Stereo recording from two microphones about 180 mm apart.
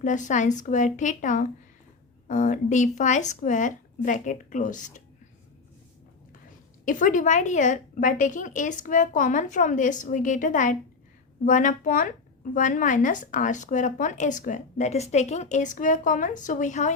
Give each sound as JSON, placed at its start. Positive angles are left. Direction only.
{"t": 0.0, "sound": "a woman's voice", "side_deg": 45}
{"t": 6.8, "sound": "a woman's voice", "side_deg": 45}